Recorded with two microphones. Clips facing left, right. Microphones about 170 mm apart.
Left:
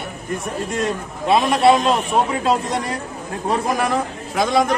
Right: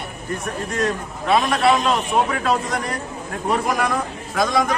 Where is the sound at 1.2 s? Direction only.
25° left (ahead or behind).